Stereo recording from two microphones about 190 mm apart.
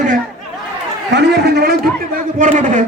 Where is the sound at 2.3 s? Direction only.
45° right (ahead or behind).